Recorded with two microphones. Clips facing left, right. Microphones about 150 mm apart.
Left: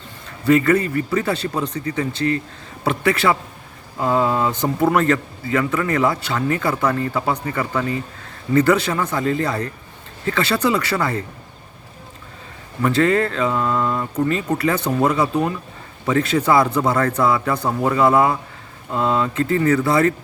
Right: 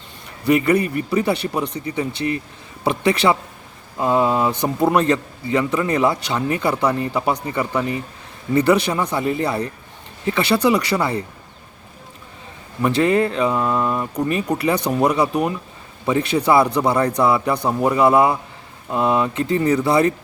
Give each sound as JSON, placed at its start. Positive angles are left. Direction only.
{"t": 0.3, "sound": "a man's voice", "side_deg": -15}
{"t": 12.8, "sound": "a man's voice", "side_deg": -15}